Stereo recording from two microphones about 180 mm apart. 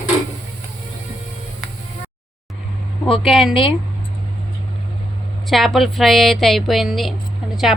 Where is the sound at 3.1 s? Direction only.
Centre (ahead or behind).